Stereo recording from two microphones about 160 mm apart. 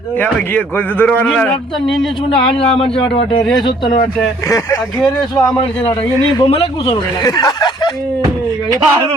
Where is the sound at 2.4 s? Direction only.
35° left (ahead or behind).